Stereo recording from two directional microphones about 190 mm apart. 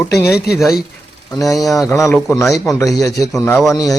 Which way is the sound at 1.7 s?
15° left (ahead or behind).